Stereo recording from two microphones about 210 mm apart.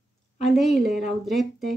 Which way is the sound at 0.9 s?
Centre (ahead or behind).